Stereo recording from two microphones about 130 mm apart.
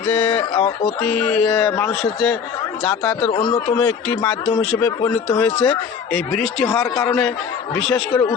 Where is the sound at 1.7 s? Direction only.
15° left (ahead or behind).